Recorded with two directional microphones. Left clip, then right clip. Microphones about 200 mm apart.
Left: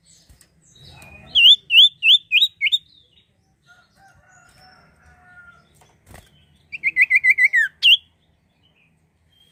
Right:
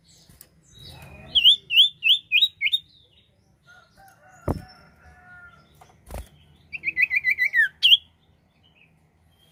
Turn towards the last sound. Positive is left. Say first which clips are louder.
# left 4 dB
turn(degrees=15)  # may be behind; listen again after turning